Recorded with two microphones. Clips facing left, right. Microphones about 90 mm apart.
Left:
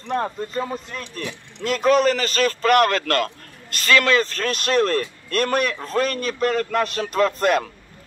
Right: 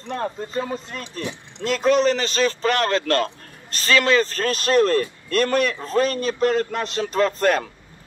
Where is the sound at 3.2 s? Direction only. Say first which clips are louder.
Even; 30° right (ahead or behind).